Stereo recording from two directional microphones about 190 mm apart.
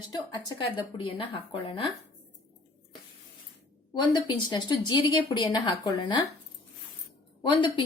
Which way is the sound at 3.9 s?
25° left (ahead or behind).